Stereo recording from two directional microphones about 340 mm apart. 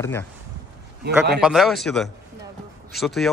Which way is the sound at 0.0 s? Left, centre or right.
Centre.